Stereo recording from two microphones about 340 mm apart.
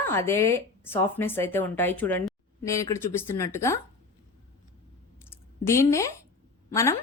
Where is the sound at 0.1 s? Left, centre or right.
Centre.